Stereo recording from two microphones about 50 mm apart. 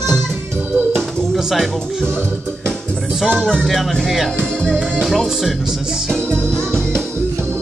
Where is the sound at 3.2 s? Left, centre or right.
Centre.